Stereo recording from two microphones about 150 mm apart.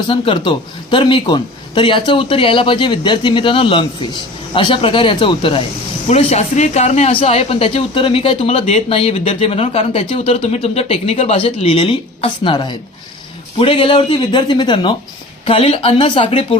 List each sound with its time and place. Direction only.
0.1 s speech: 35° left (ahead or behind)
6.1 s speech: 45° left (ahead or behind)